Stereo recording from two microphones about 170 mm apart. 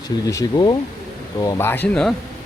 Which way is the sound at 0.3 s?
20° left (ahead or behind).